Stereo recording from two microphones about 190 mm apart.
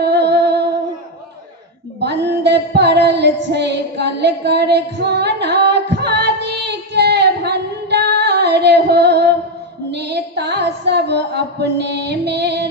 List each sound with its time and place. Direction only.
0.0 s music: 60° right (ahead or behind)
2.0 s female singing: 60° right (ahead or behind)
9.9 s music: 60° right (ahead or behind)